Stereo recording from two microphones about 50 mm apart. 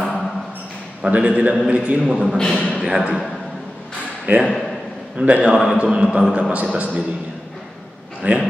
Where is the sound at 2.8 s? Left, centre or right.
Centre.